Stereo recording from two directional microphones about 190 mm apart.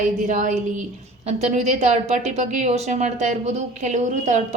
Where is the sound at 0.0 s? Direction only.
40° right (ahead or behind).